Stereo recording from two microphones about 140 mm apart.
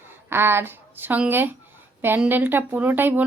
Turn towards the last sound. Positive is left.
turn(degrees=-15)  # may be behind; listen again after turning